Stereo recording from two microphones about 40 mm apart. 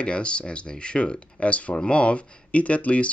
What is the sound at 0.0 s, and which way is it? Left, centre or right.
Speech, left.